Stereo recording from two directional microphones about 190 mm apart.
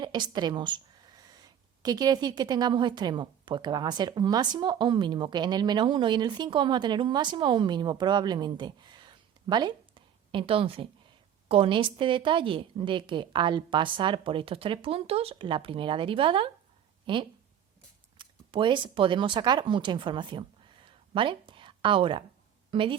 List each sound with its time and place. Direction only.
0.0 s a woman's voice: 25° right (ahead or behind)
20.8 s a sound: 25° right (ahead or behind)
22.7 s a woman's voice: 25° right (ahead or behind)